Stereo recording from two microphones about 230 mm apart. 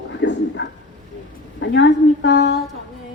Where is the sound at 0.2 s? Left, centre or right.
Left.